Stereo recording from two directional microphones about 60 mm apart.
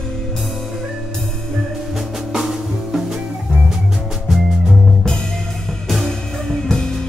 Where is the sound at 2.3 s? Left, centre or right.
Centre.